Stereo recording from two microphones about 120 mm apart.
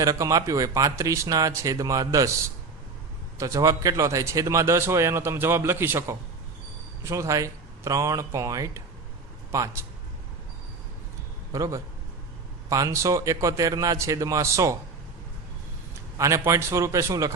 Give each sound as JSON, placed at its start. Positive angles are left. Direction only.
{"t": 0.0, "sound": "a man's voice", "side_deg": -25}
{"t": 3.3, "sound": "a man's voice", "side_deg": -25}
{"t": 11.5, "sound": "a man's voice", "side_deg": -30}
{"t": 16.1, "sound": "a man's voice", "side_deg": -25}